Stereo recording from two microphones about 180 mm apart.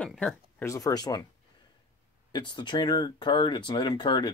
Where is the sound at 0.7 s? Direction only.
15° left (ahead or behind).